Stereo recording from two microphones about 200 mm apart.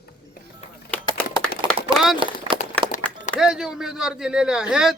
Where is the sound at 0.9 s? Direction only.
5° left (ahead or behind).